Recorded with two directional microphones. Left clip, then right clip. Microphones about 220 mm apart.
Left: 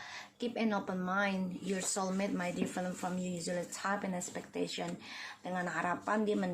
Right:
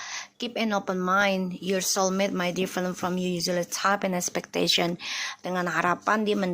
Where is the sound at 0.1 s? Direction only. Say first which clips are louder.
Right 5 dB; 35° right (ahead or behind).